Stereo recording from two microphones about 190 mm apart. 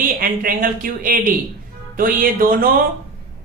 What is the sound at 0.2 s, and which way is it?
Speech, 50° right (ahead or behind).